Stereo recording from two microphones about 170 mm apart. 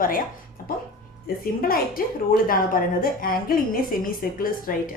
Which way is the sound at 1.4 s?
60° left (ahead or behind).